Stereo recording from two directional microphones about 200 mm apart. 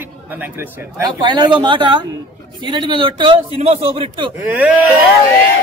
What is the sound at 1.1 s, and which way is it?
A man's voice, 20° right (ahead or behind).